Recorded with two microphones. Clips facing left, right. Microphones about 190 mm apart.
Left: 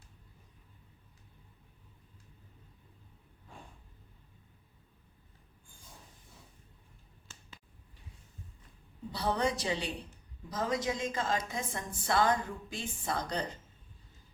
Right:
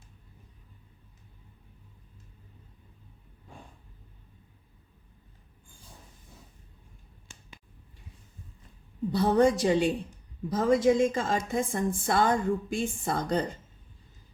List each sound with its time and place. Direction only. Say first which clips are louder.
7.3 s finger snapping: right 3 dB; 15° right (ahead or behind)
9.1 s a woman's voice: right 9 dB; 50° right (ahead or behind)